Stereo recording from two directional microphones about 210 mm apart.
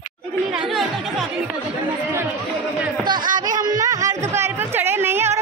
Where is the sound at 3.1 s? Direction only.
20° right (ahead or behind).